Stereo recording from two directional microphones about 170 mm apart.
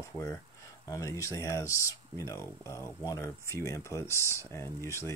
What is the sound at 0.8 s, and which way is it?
Speech, 20° left (ahead or behind).